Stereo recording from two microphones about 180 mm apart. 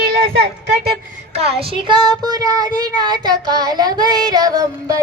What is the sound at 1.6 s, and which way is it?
Child singing, 25° right (ahead or behind).